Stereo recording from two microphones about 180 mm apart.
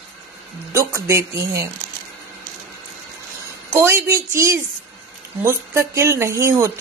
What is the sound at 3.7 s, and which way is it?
Speech, 15° right (ahead or behind).